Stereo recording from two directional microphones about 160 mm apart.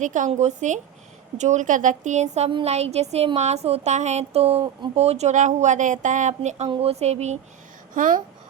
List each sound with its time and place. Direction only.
0.0 s speech: 50° right (ahead or behind)
7.9 s speech: 55° right (ahead or behind)